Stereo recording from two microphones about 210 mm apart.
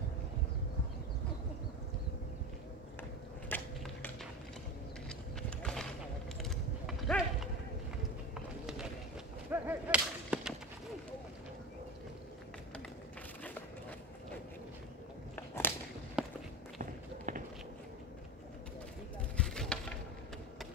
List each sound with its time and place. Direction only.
3.4 s mechanisms: 10° left (ahead or behind)
5.6 s a sound: 5° left (ahead or behind)
9.5 s whip: 10° right (ahead or behind)
15.3 s biting: 10° left (ahead or behind)
16.2 s walk: centre (ahead or behind)
17.3 s walk: 35° right (ahead or behind)
19.3 s a sound: 5° left (ahead or behind)